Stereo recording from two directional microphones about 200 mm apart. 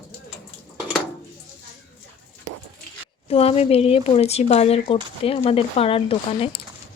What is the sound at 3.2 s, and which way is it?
Speech, 30° left (ahead or behind).